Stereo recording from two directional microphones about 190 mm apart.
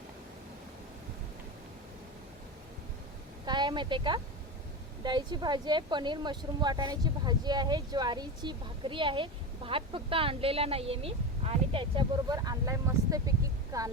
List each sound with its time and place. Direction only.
3.4 s a woman's voice: 25° right (ahead or behind)